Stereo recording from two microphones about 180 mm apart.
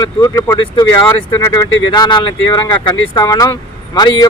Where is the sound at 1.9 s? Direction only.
25° left (ahead or behind).